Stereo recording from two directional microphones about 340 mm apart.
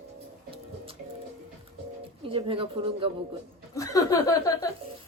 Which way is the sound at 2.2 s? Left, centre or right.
Centre.